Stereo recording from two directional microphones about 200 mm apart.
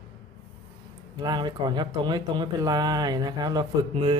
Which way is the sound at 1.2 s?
20° right (ahead or behind).